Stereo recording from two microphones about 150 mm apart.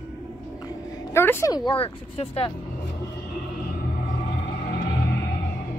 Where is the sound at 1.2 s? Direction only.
15° left (ahead or behind); by 2.5 s 40° left (ahead or behind).